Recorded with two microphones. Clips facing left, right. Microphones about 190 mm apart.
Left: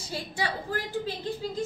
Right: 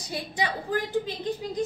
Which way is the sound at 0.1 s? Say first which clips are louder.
Right 2 dB; 20° right (ahead or behind).